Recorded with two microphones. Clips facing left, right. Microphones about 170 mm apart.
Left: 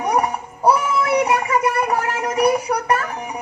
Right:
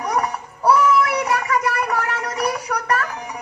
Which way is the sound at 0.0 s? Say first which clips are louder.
Left 3 dB; 30° left (ahead or behind).